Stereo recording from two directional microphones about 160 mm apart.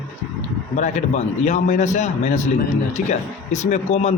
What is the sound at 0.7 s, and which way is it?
A man's voice, 45° left (ahead or behind).